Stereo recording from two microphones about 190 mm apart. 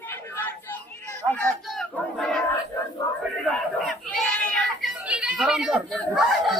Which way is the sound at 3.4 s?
Centre (ahead or behind).